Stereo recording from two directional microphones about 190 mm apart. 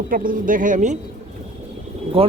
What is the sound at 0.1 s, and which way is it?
Speech, 45° right (ahead or behind).